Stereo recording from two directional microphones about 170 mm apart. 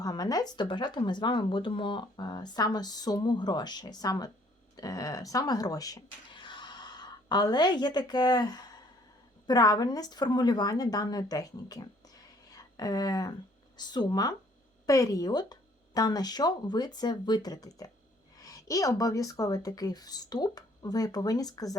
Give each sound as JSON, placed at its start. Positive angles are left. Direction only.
{"t": 0.0, "sound": "speech", "side_deg": 20}